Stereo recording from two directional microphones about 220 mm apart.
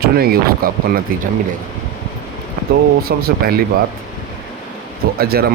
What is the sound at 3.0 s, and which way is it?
Speech, 45° right (ahead or behind).